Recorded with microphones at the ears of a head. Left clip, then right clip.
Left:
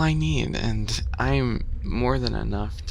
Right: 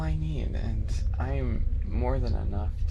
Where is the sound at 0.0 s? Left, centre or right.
Left.